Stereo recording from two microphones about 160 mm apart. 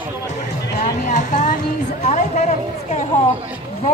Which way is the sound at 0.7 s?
50° left (ahead or behind).